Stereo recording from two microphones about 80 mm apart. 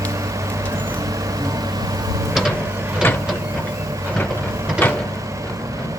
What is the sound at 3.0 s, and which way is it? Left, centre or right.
Vehicle, left.